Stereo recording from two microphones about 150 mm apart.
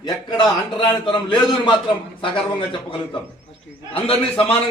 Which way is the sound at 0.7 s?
35° left (ahead or behind).